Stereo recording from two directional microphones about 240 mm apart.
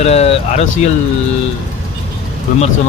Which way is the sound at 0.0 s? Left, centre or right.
Left.